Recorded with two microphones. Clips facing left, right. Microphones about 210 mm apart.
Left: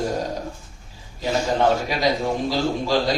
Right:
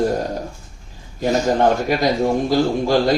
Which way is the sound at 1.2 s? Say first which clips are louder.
Right 4 dB; 45° right (ahead or behind).